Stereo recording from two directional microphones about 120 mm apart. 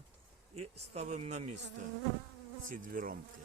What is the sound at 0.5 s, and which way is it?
Speech, 65° right (ahead or behind).